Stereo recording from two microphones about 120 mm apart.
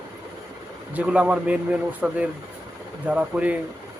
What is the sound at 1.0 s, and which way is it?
Speech, 10° right (ahead or behind).